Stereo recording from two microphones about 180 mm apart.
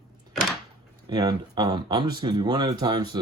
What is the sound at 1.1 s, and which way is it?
Speech, 25° right (ahead or behind).